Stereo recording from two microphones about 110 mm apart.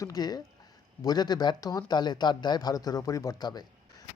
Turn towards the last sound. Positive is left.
turn(degrees=40)  # may be behind; listen again after turning